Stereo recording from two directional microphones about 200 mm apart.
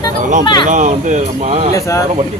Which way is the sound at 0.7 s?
40° right (ahead or behind).